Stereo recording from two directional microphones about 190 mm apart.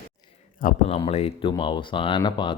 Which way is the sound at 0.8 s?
30° left (ahead or behind).